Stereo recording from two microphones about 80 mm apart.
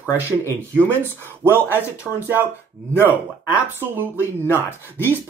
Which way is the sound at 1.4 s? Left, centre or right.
Right.